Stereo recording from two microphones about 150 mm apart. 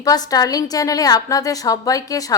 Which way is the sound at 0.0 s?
25° left (ahead or behind).